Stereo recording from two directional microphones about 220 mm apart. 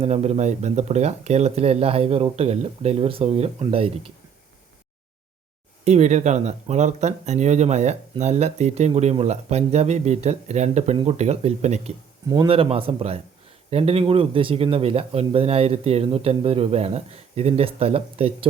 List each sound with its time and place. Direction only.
0.0 s speech: 30° right (ahead or behind)
5.8 s speech: 30° right (ahead or behind)